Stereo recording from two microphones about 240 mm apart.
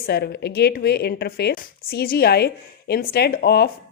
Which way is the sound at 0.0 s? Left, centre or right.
Left.